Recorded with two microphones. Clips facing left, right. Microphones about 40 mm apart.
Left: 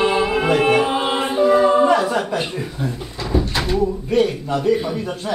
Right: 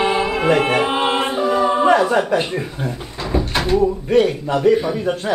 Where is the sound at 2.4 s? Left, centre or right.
Right.